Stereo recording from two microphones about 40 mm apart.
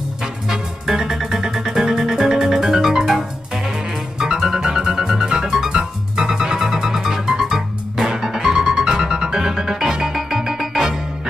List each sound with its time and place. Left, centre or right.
0.2 s music: centre